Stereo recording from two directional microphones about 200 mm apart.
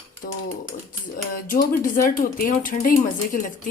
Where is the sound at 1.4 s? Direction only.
45° left (ahead or behind).